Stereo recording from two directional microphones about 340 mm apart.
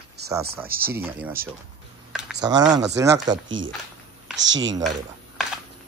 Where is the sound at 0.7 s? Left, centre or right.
Right.